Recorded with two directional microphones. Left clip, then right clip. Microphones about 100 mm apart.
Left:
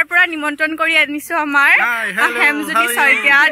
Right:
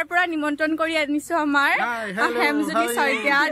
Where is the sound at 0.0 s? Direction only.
20° left (ahead or behind).